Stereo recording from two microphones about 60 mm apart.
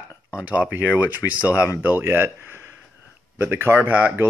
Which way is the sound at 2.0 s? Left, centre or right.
Right.